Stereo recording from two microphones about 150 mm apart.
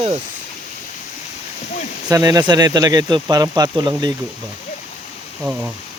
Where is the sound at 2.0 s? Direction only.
25° right (ahead or behind).